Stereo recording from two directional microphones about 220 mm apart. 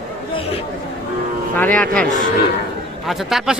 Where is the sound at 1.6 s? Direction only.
5° left (ahead or behind).